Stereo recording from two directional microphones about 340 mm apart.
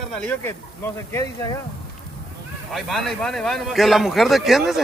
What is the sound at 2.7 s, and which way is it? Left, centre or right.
A man's voice, centre.